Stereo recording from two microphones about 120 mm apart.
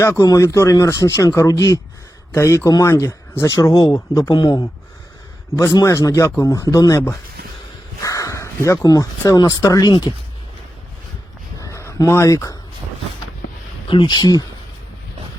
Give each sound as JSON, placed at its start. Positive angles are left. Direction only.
{"t": 0.0, "sound": "speech", "side_deg": 30}
{"t": 4.3, "sound": "speech", "side_deg": 35}
{"t": 8.0, "sound": "speech", "side_deg": 30}
{"t": 9.9, "sound": "speech", "side_deg": 40}
{"t": 11.6, "sound": "a sound", "side_deg": 25}
{"t": 13.8, "sound": "speech", "side_deg": 45}